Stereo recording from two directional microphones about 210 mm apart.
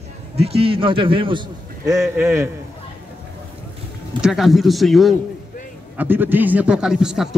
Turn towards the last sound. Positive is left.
turn(degrees=-5)  # may be behind; listen again after turning